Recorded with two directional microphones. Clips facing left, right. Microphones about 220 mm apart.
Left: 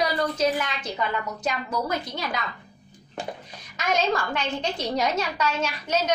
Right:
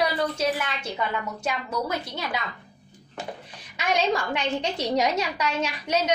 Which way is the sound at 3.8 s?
15° right (ahead or behind).